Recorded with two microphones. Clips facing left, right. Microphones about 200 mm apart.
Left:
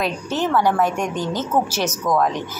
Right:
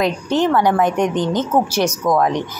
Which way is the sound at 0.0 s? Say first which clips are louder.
Right 5 dB; 15° right (ahead or behind).